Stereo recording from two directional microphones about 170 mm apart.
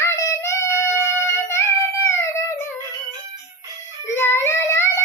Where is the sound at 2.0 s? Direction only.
15° left (ahead or behind).